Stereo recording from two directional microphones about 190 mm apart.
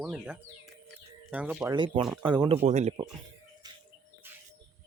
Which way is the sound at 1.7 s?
25° right (ahead or behind).